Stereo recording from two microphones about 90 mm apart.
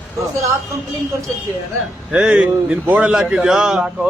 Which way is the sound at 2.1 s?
10° right (ahead or behind).